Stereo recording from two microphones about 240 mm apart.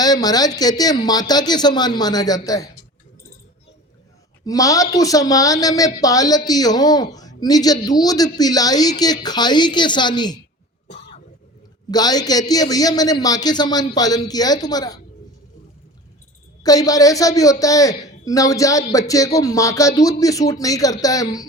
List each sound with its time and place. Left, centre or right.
0.0 s a woman's voice: centre
4.4 s a woman's voice: centre
11.9 s a woman's voice: centre
16.6 s a woman's voice: centre